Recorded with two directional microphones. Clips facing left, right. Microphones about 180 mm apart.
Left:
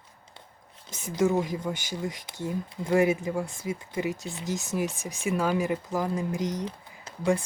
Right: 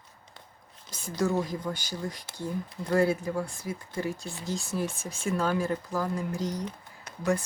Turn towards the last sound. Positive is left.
turn(degrees=30)  # may be behind; listen again after turning